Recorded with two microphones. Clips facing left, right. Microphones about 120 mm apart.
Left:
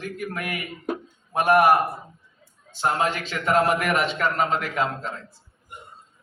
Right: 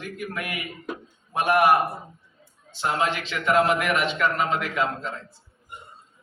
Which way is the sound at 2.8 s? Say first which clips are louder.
Left 1 dB; 45° left (ahead or behind).